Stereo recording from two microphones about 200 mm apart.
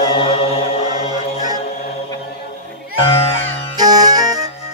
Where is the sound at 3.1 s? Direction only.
30° left (ahead or behind).